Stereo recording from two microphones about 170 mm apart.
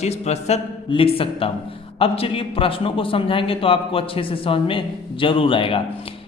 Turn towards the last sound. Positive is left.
turn(degrees=30)  # may be behind; listen again after turning